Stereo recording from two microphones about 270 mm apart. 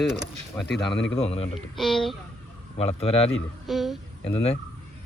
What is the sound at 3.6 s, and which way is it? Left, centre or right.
Speech, centre.